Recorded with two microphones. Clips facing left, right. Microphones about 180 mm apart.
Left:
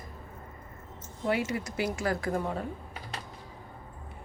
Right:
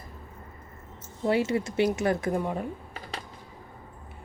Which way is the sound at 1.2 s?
30° right (ahead or behind).